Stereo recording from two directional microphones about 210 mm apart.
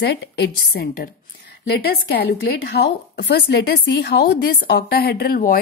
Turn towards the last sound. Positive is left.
turn(degrees=45)  # may be behind; listen again after turning